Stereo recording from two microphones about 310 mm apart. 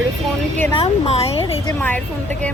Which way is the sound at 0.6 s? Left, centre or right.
Centre.